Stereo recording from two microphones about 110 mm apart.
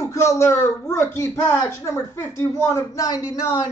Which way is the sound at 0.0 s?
30° left (ahead or behind).